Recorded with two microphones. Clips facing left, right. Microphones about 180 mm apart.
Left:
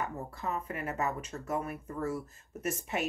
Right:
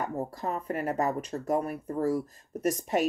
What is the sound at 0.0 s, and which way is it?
Speech, 40° right (ahead or behind).